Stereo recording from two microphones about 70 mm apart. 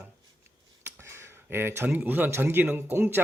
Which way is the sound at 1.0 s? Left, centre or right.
Right.